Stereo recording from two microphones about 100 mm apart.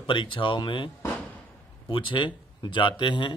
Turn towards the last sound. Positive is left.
turn(degrees=50)  # may be behind; listen again after turning